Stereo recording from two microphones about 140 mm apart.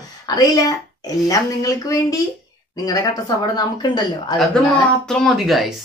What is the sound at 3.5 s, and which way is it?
Speech, 30° left (ahead or behind).